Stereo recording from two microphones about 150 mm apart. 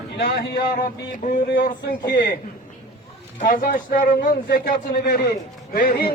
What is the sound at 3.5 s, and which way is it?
Speech, 65° left (ahead or behind).